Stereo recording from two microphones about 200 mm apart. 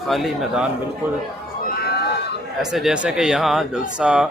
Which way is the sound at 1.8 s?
55° left (ahead or behind).